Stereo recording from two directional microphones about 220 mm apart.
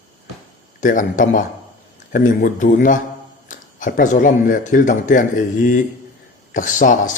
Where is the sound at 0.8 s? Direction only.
35° left (ahead or behind).